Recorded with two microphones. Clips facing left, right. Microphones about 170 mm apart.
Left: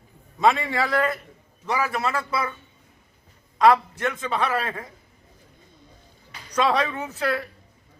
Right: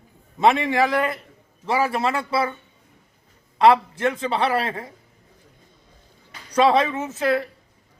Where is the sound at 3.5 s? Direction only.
30° right (ahead or behind).